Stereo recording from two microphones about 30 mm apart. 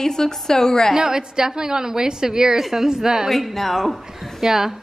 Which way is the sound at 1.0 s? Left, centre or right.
Right.